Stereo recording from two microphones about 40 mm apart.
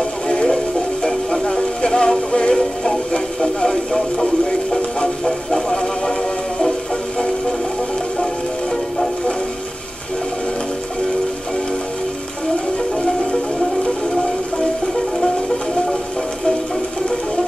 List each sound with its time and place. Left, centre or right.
1.0 s music: centre
3.3 s speech: centre
5.2 s a sound: centre